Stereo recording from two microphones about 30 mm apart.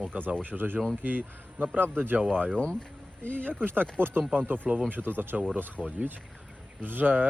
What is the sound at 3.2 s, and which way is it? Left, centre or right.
Speech, left.